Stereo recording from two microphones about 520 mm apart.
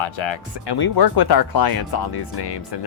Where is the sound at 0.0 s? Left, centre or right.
Left.